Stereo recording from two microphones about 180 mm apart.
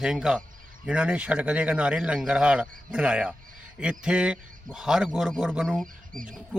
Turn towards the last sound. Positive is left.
turn(degrees=0)  # may be behind; listen again after turning